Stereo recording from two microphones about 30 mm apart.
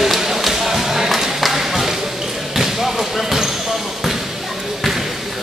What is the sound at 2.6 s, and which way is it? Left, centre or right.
Basketball bounce, centre.